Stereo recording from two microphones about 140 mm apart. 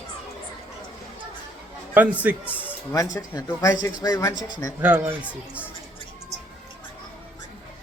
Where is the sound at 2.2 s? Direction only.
10° right (ahead or behind).